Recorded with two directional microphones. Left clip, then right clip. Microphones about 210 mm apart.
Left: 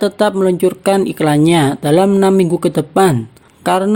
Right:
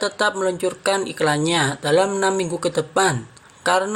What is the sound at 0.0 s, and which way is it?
Speech, 50° left (ahead or behind).